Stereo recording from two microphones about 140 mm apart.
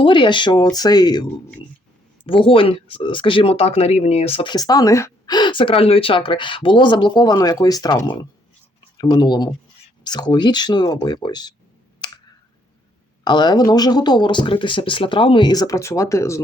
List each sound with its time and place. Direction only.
0.0 s speech: 35° left (ahead or behind)
4.5 s speech: 25° left (ahead or behind)
11.9 s clicking: 30° left (ahead or behind)
13.2 s speech: 30° left (ahead or behind)